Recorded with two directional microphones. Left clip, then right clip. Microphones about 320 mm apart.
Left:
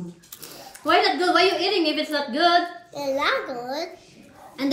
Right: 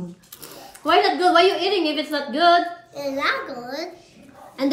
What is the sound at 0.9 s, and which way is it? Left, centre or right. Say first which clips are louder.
A woman's voice: right 2 dB; centre.